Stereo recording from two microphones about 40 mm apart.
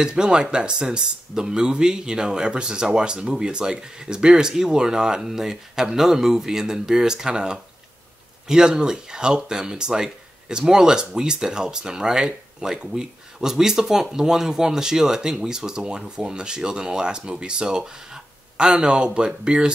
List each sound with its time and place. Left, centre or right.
0.0 s speech: centre